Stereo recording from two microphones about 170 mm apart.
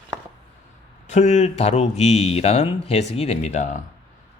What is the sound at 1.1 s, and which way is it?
A man's voice, 40° left (ahead or behind).